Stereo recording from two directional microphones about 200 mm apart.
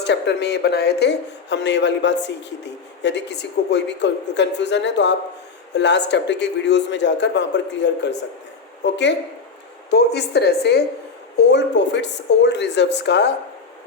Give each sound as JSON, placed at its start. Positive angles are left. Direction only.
{"t": 0.0, "sound": "speech", "side_deg": 60}